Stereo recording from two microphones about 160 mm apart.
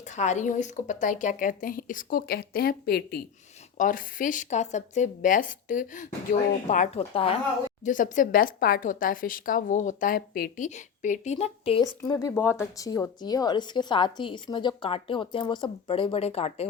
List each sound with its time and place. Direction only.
0.2 s a woman's voice: 45° left (ahead or behind); by 3.2 s 85° left
3.8 s a woman's voice: 55° left (ahead or behind)
7.1 s speech: 35° left (ahead or behind)
7.9 s a woman's voice: 55° left (ahead or behind)
10.8 s a woman's voice: 50° left (ahead or behind)
12.0 s a woman's voice: 25° left (ahead or behind); by 16.6 s 40° left (ahead or behind)